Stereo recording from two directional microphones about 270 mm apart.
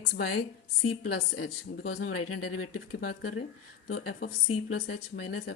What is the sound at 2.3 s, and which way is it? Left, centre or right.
Speech, left.